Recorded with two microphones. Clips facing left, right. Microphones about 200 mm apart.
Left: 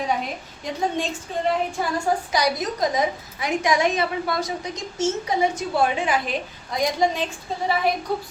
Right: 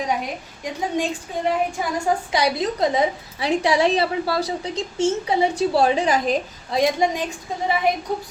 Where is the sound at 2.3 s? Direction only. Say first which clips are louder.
Right 2 dB; 25° right (ahead or behind).